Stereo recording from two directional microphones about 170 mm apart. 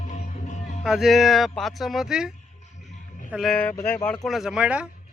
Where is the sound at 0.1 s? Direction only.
45° left (ahead or behind).